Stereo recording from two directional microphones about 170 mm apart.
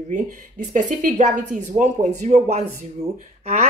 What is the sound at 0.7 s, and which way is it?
Speech, 45° right (ahead or behind).